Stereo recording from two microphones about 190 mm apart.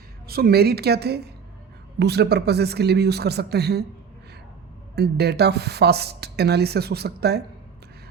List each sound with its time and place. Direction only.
0.3 s speech: 55° right (ahead or behind)
4.9 s speech: 60° right (ahead or behind)